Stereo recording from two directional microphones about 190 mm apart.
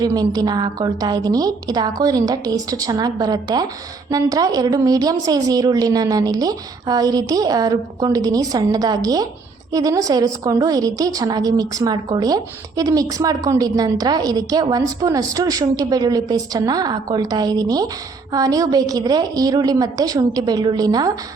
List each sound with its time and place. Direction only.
0.0 s a woman's voice: 20° right (ahead or behind)